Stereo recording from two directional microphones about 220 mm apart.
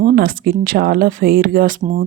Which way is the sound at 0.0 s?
40° right (ahead or behind).